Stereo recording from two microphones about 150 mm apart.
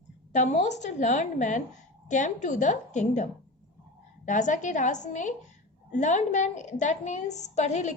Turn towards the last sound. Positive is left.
turn(degrees=50)  # may be behind; listen again after turning